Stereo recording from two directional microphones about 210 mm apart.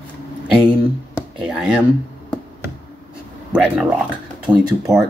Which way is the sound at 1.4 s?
5° right (ahead or behind).